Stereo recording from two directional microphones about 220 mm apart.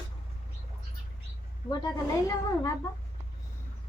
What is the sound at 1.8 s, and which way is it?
Speech, 15° left (ahead or behind).